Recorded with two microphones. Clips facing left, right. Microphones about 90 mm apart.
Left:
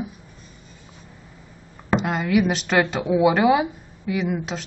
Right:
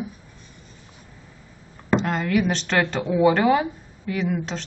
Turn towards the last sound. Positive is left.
turn(degrees=10)  # may be behind; listen again after turning